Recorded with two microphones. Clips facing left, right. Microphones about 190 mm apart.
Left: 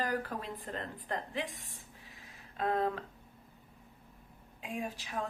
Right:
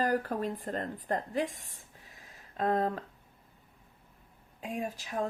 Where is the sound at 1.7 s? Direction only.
45° right (ahead or behind).